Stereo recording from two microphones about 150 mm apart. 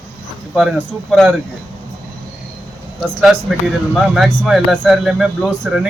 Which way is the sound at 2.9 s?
5° right (ahead or behind).